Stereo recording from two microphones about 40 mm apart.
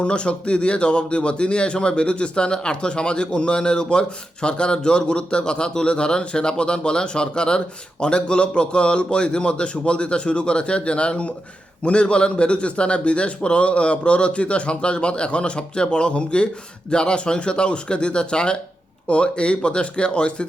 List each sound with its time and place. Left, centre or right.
0.0 s a man's voice: left